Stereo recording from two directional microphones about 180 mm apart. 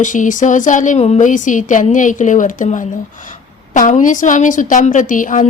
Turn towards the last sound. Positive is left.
turn(degrees=45)  # may be behind; listen again after turning